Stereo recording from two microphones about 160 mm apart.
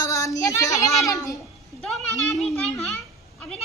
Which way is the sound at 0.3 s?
20° left (ahead or behind).